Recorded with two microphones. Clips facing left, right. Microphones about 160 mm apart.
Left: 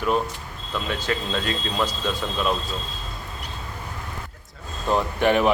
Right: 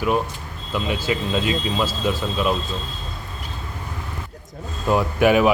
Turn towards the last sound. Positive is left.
turn(degrees=-5)  # may be behind; listen again after turning